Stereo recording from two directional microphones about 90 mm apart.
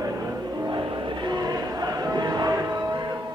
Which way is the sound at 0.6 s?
60° right (ahead or behind).